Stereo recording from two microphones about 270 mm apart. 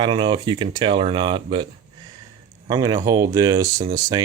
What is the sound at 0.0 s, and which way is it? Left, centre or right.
Speech, centre.